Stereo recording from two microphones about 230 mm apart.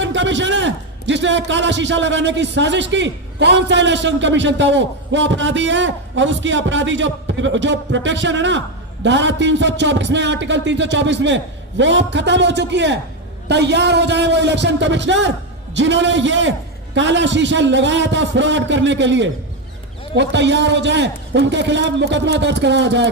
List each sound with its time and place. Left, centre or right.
0.0 s a man's voice: right